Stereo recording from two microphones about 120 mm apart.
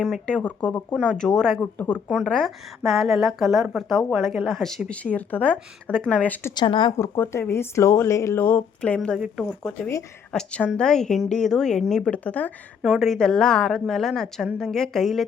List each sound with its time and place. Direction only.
0.0 s a woman's voice: 5° left (ahead or behind)
6.5 s speech: 40° left (ahead or behind)
6.9 s a woman's voice: 20° left (ahead or behind); by 15.3 s centre (ahead or behind)